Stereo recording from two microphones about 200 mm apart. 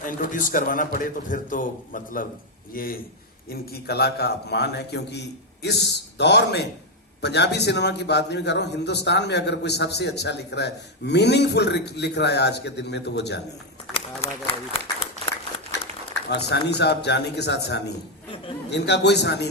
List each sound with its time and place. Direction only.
0.0 s a man's voice: 40° left (ahead or behind); by 13.4 s 60° left (ahead or behind)
13.9 s run: 30° left (ahead or behind)
16.5 s a man's voice: 55° left (ahead or behind)